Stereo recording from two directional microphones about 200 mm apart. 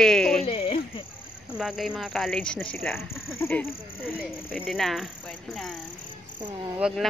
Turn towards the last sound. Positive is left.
turn(degrees=-5)  # may be behind; listen again after turning